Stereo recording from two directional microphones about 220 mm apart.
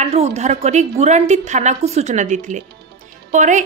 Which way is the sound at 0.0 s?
30° right (ahead or behind).